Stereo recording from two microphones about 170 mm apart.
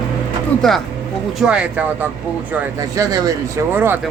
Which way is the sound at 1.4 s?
5° right (ahead or behind).